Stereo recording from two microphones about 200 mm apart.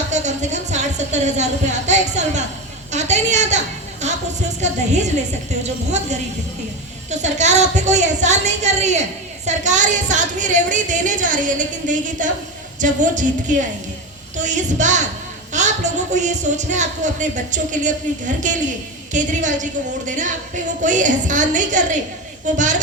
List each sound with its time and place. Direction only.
0.1 s a woman's voice: 35° right (ahead or behind)
4.0 s a sound: 35° right (ahead or behind)
4.6 s a woman's voice: 35° right (ahead or behind)